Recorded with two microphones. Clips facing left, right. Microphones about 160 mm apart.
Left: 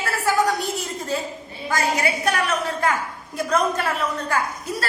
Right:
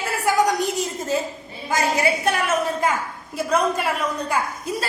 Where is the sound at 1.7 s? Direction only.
25° right (ahead or behind).